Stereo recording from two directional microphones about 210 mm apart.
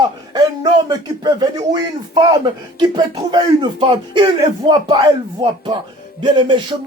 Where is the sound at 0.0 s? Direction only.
20° right (ahead or behind).